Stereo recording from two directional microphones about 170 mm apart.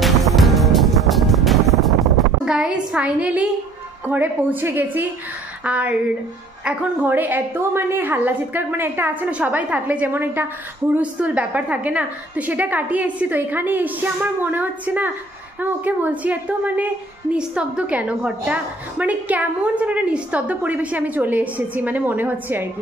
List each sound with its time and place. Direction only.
0.0 s music: centre (ahead or behind)
4.1 s a woman's voice: 10° right (ahead or behind)